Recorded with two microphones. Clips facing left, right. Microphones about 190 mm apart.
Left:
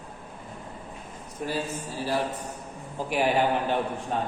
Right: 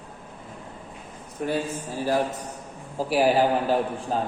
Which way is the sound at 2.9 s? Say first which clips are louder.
Right 4 dB; 35° right (ahead or behind).